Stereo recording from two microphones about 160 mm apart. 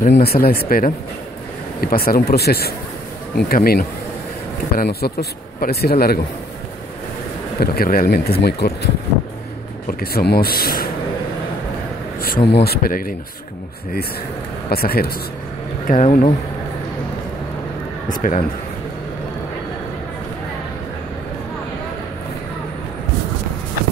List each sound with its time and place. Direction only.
0.0 s speech: 75° left (ahead or behind)
4.7 s speech: 80° left
7.6 s speech: 70° left (ahead or behind); by 8.9 s 90° left
9.8 s speech: 70° left (ahead or behind)
12.4 s speech: 85° left; by 13.1 s 65° left (ahead or behind)
14.7 s speech: 70° left (ahead or behind)
15.9 s speech: 60° left (ahead or behind)
18.0 s speech: 55° left (ahead or behind)